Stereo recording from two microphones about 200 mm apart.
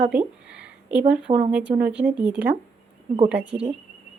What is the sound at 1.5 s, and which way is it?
Speech, 5° right (ahead or behind).